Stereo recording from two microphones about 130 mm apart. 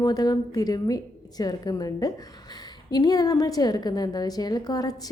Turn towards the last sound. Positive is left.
turn(degrees=30)  # may be behind; listen again after turning